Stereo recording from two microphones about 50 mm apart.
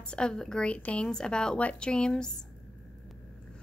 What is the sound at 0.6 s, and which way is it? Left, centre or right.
A woman's voice, left.